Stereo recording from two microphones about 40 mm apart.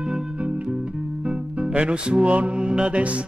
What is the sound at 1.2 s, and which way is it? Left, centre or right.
Music, right.